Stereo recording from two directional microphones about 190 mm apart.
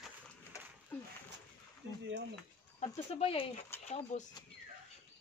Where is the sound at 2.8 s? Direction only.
35° left (ahead or behind).